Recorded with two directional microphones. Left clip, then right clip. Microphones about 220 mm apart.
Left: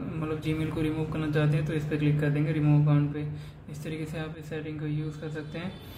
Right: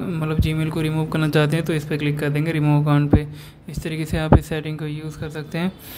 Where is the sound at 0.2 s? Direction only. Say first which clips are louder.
Right 4 dB; 45° right (ahead or behind).